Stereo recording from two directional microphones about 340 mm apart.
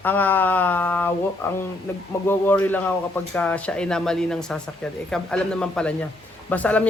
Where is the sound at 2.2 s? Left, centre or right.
Centre.